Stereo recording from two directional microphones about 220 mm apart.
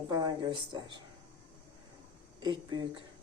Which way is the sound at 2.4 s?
20° right (ahead or behind).